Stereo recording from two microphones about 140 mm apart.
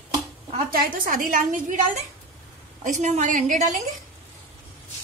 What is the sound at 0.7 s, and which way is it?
Speech, 85° right.